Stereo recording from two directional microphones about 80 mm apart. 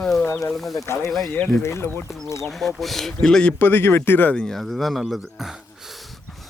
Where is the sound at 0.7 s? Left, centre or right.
Left.